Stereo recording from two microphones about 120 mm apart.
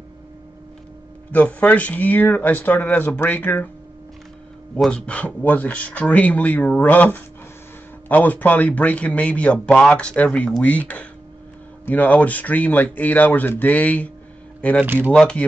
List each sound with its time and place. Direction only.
1.3 s a man's voice: 15° left (ahead or behind)
4.7 s a man's voice: 5° left (ahead or behind)
14.8 s speech: 15° right (ahead or behind)
15.1 s a man's voice: 10° left (ahead or behind)